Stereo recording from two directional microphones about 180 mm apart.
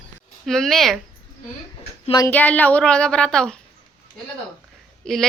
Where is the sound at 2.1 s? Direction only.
20° left (ahead or behind).